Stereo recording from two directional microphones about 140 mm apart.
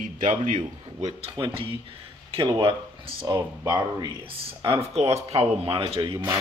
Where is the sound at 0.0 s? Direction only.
65° right (ahead or behind).